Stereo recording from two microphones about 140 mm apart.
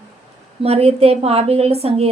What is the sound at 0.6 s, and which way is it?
A woman's voice, 45° right (ahead or behind).